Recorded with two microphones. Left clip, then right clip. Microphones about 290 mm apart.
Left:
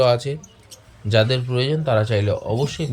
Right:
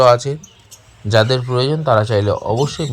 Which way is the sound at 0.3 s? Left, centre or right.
Right.